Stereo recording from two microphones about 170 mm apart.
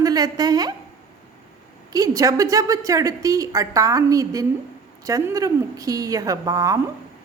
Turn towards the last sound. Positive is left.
turn(degrees=-20)  # may be behind; listen again after turning